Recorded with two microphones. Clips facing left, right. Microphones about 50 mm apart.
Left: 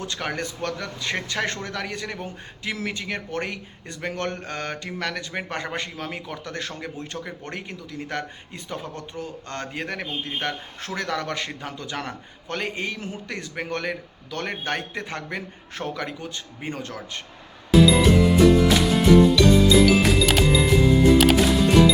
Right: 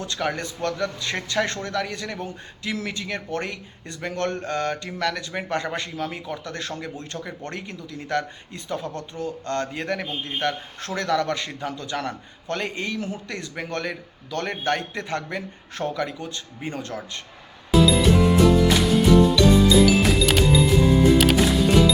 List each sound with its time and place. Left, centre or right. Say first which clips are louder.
0.0 s a man's voice: right 2 dB; left
17.7 s music: left 1 dB; centre